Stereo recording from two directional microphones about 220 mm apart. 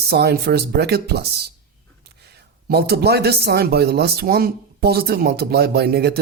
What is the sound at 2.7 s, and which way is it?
Speech, 45° right (ahead or behind).